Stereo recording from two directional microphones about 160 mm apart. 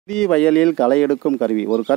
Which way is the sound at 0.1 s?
5° left (ahead or behind).